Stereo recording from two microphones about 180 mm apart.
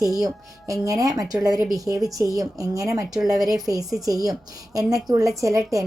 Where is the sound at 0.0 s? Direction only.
20° right (ahead or behind).